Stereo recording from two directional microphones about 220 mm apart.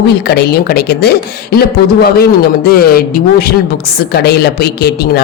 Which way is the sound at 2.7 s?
45° left (ahead or behind).